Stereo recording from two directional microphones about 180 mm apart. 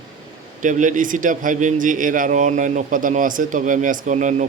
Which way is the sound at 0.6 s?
45° right (ahead or behind).